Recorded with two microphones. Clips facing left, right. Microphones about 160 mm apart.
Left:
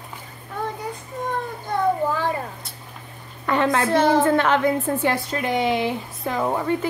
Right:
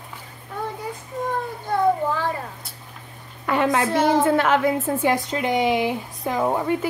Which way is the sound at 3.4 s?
10° right (ahead or behind).